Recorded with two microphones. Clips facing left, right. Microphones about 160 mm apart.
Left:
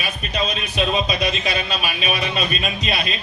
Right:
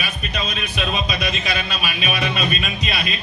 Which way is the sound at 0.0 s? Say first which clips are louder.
Left 3 dB; 35° left (ahead or behind).